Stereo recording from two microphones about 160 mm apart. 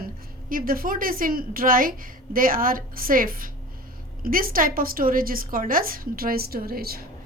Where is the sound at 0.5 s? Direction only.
65° right (ahead or behind).